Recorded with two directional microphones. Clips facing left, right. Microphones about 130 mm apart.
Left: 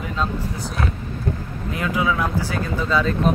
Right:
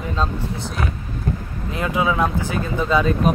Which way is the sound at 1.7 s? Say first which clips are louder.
Right 2 dB; 25° right (ahead or behind).